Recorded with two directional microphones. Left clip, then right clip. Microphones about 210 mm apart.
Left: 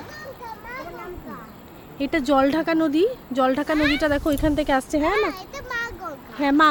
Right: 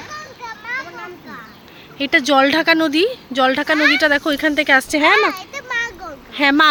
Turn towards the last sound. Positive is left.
turn(degrees=-5)  # may be behind; listen again after turning